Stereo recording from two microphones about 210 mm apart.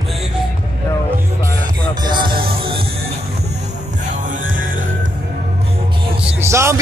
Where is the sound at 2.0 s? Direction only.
20° right (ahead or behind).